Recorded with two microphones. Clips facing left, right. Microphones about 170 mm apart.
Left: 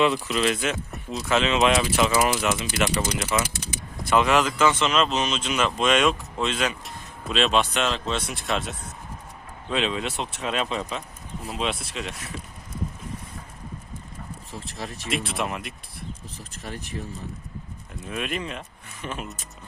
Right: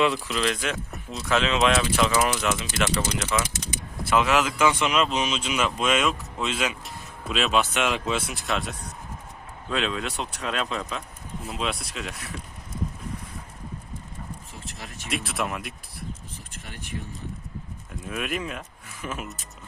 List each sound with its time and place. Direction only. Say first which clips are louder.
0.0 s speech: left 2 dB; centre (ahead or behind)
4.1 s speech: left 2 dB; centre (ahead or behind)
14.6 s speech: left 5 dB; 35° left (ahead or behind)
15.1 s speech: even; centre (ahead or behind)
16.5 s speech: left 9 dB; 40° left (ahead or behind)
18.1 s speech: even; 5° right (ahead or behind)